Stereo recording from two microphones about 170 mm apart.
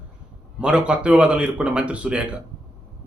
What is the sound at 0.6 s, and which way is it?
A man's voice, 5° right (ahead or behind).